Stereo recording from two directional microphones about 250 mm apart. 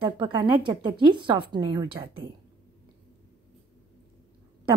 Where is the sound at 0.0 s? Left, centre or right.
Centre.